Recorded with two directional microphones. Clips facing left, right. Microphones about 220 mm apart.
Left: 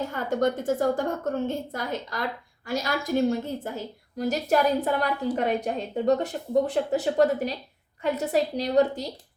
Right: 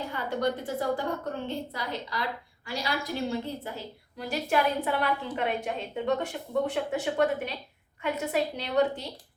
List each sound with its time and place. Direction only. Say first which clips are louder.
0.1 s a woman's voice: left 2 dB; 45° left (ahead or behind)